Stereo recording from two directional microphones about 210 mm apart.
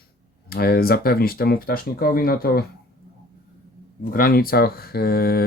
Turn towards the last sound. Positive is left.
turn(degrees=45)  # may be behind; listen again after turning